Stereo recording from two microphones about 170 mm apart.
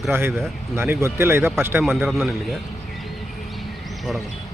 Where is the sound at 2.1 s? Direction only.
Centre (ahead or behind).